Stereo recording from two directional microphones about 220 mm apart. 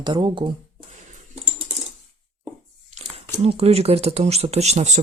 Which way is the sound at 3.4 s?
30° right (ahead or behind).